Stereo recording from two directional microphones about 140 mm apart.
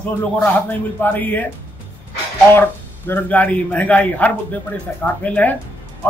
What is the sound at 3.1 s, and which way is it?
A man's voice, 15° left (ahead or behind).